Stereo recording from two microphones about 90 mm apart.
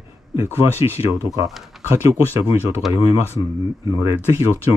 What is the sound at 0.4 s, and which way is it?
Speech, 30° right (ahead or behind).